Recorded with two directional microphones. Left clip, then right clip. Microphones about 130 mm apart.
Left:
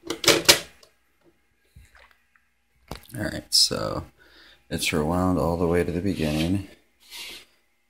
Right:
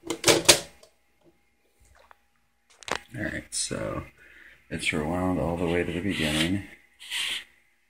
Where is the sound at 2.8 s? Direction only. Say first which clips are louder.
Right 2 dB; 10° left (ahead or behind).